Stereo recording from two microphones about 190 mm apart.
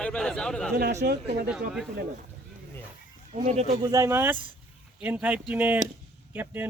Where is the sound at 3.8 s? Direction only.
20° right (ahead or behind).